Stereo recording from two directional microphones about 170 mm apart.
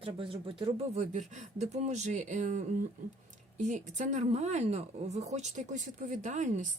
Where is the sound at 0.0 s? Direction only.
30° right (ahead or behind).